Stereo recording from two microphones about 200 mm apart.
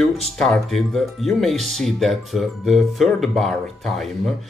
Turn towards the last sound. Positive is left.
turn(degrees=0)  # may be behind; listen again after turning